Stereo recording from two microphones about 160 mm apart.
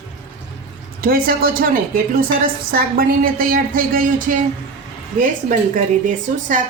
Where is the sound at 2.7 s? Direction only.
65° right (ahead or behind).